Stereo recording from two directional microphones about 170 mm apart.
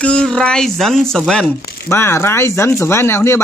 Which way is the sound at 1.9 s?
15° left (ahead or behind).